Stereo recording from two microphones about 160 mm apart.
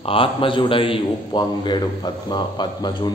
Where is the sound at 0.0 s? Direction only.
35° left (ahead or behind).